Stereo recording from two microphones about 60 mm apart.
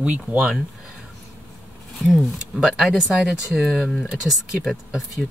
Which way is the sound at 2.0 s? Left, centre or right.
Centre.